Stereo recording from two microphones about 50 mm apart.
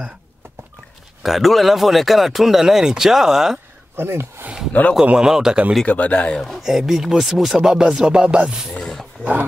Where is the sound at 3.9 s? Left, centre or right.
Right.